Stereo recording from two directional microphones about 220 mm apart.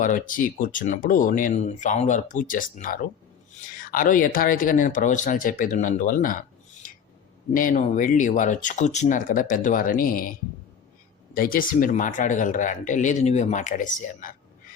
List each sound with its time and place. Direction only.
0.0 s speech: 35° left (ahead or behind)
7.5 s speech: 35° left (ahead or behind)
11.3 s speech: 40° left (ahead or behind)